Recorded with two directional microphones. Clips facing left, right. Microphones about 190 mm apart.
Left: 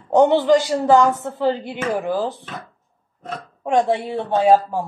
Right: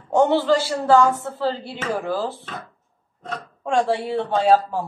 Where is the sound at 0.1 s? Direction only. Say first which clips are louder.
Left 3 dB; 20° left (ahead or behind).